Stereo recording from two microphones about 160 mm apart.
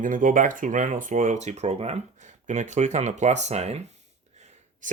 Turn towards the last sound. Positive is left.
turn(degrees=-55)  # may be behind; listen again after turning